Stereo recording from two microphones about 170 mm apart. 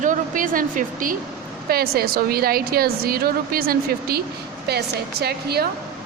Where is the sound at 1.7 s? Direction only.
65° right (ahead or behind).